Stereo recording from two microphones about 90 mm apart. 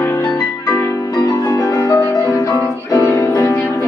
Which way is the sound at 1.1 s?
45° left (ahead or behind).